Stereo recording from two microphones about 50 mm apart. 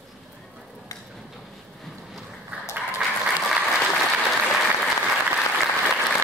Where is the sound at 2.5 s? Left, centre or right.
Right.